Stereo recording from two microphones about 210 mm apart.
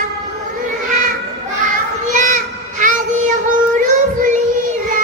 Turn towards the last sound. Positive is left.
turn(degrees=-35)  # may be behind; listen again after turning